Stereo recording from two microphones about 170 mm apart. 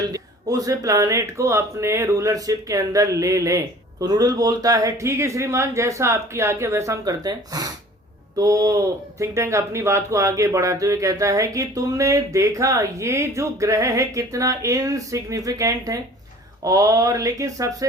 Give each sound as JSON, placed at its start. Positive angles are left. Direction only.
{"t": 0.0, "sound": "speech", "side_deg": -20}